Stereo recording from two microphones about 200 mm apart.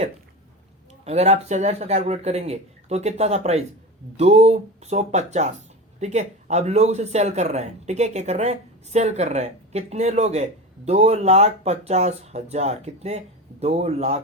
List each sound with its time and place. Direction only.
1.0 s speech: 35° right (ahead or behind)